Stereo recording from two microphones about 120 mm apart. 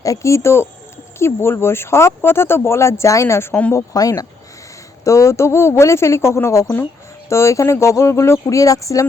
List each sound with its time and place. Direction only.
0.0 s speech: 25° left (ahead or behind)